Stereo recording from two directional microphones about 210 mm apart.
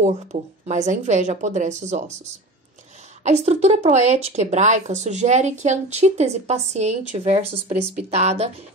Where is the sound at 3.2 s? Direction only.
30° right (ahead or behind).